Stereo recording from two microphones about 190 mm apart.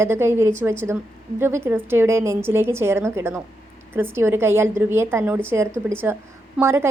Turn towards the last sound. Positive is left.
turn(degrees=-15)  # may be behind; listen again after turning